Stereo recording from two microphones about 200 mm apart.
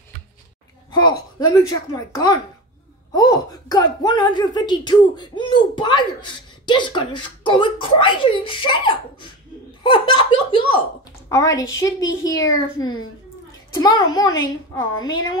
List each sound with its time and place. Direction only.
0.9 s speech: 20° left (ahead or behind)